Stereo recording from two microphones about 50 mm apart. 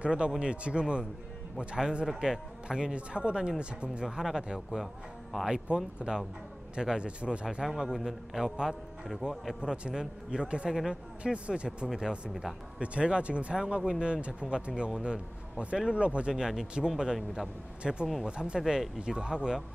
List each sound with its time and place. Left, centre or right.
0.0 s a man's voice: centre
4.0 s a man's voice: centre
7.5 s a man's voice: centre
9.6 s a man's voice: centre